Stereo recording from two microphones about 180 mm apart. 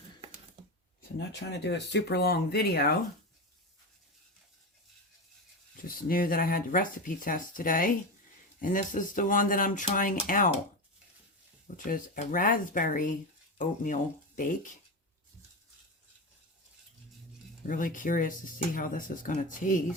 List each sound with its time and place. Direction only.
1.3 s speech: 70° left (ahead or behind)
5.8 s speech: 50° left (ahead or behind)
11.9 s speech: 50° left (ahead or behind)
17.7 s speech: 50° left (ahead or behind)